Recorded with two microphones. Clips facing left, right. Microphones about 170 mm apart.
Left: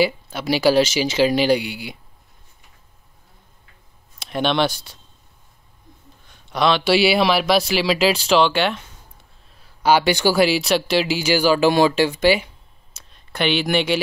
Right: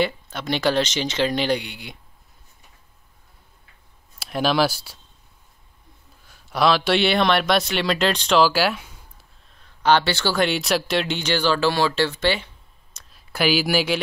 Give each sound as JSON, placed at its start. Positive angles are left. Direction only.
{"t": 0.0, "sound": "speech", "side_deg": 5}
{"t": 4.2, "sound": "speech", "side_deg": 0}
{"t": 6.2, "sound": "a man's voice", "side_deg": -5}
{"t": 9.6, "sound": "speech", "side_deg": 10}
{"t": 12.9, "sound": "speech", "side_deg": -5}